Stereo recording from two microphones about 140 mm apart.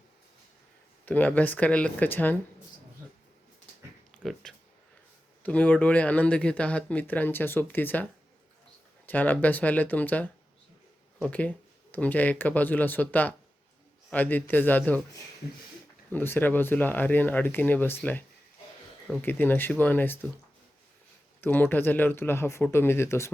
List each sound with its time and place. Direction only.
1.0 s speech: 10° left (ahead or behind)
4.1 s a sound: centre (ahead or behind)
5.4 s speech: 10° left (ahead or behind)
9.0 s speech: 10° left (ahead or behind)
16.1 s speech: 15° left (ahead or behind)
21.4 s speech: 15° left (ahead or behind)